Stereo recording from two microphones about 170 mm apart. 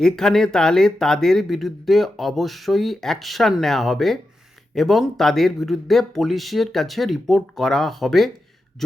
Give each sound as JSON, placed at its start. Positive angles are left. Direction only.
{"t": 0.0, "sound": "speech", "side_deg": 5}